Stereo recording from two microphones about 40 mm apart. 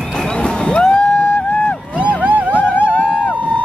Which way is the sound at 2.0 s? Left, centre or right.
Right.